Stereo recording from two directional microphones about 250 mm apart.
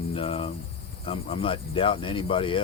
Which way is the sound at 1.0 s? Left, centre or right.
Left.